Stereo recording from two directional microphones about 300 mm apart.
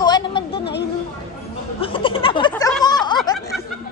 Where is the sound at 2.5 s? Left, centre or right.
Centre.